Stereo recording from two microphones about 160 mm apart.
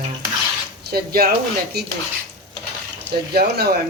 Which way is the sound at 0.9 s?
75° right (ahead or behind).